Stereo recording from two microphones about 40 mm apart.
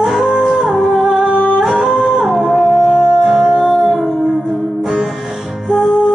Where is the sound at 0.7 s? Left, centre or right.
Centre.